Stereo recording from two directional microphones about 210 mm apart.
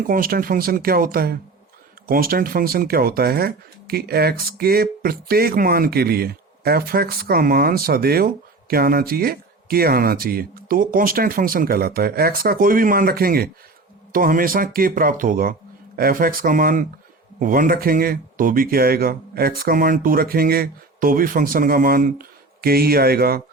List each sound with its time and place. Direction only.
0.1 s speech: 45° right (ahead or behind)